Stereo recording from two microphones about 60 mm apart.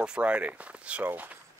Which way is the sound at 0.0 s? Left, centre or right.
Centre.